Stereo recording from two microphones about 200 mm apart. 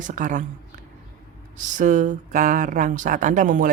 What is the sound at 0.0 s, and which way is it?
Speech, 40° right (ahead or behind).